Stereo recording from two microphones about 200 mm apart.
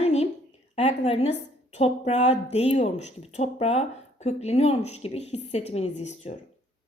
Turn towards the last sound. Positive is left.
turn(degrees=35)  # may be behind; listen again after turning